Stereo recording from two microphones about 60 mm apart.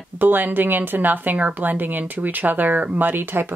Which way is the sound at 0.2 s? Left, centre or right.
Right.